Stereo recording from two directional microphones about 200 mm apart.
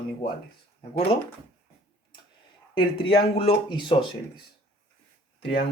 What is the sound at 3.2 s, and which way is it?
Speech, 25° left (ahead or behind).